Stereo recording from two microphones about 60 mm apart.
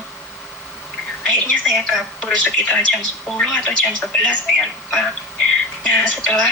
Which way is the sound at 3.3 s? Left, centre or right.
Centre.